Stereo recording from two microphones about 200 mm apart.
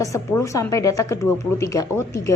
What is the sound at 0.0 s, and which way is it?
Speech, 15° left (ahead or behind).